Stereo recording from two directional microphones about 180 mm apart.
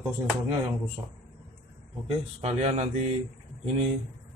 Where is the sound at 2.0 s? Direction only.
35° right (ahead or behind).